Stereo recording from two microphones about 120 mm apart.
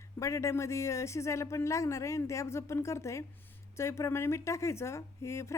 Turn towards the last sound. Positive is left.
turn(degrees=25)  # may be behind; listen again after turning